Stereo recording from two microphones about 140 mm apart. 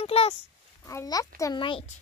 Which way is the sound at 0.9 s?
25° left (ahead or behind).